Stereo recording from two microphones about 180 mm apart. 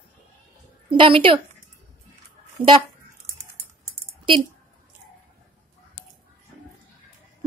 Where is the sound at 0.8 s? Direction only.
30° right (ahead or behind).